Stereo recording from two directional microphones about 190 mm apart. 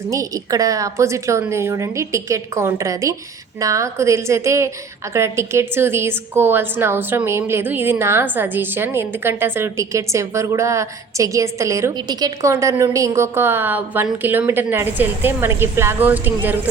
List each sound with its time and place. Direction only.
0.1 s a woman's voice: 15° right (ahead or behind)